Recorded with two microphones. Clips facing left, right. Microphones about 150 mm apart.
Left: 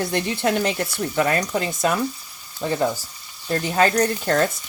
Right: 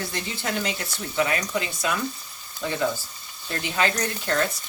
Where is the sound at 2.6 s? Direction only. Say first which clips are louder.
Left 5 dB; 35° left (ahead or behind).